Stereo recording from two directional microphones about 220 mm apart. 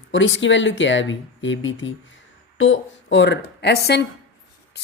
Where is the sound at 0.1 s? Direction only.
55° left (ahead or behind).